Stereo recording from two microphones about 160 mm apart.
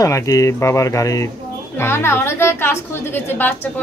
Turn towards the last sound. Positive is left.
turn(degrees=15)  # may be behind; listen again after turning